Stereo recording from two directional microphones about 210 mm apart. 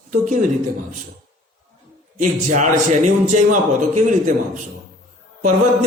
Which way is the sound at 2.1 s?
35° right (ahead or behind).